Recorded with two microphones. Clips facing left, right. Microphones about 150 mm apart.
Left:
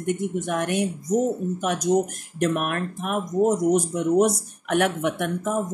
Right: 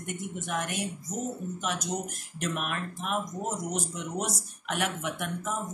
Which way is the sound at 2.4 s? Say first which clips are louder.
Left 9 dB; 55° left (ahead or behind).